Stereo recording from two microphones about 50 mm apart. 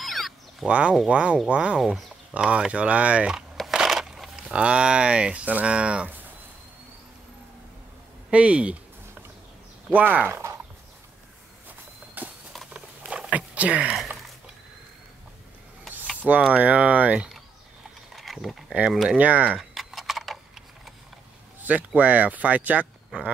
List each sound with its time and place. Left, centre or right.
0.0 s cat: centre
0.7 s speech: right
3.7 s a sound: centre
4.4 s speech: right
8.3 s a sound: right
9.8 s speech: right
12.2 s a sound: right
12.7 s patter: centre
13.3 s speech: right
16.2 s speech: right
18.1 s a sound: centre
19.1 s speech: right
19.7 s tick-tock: centre
21.6 s speech: right